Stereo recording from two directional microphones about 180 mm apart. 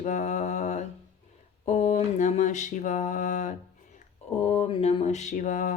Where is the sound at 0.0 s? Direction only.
40° left (ahead or behind).